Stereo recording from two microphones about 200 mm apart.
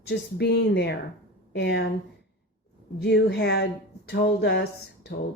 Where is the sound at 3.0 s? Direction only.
55° left (ahead or behind).